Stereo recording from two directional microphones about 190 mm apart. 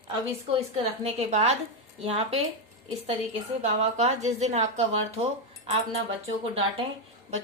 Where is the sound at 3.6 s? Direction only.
35° right (ahead or behind).